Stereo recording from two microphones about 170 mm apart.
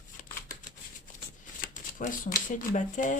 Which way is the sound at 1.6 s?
50° left (ahead or behind).